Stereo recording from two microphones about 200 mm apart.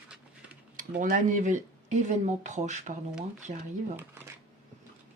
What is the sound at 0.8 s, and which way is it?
Speech, 45° right (ahead or behind).